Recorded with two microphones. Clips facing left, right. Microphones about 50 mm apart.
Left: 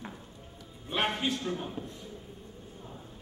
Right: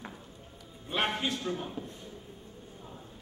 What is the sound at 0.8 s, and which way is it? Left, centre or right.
A man's voice, centre.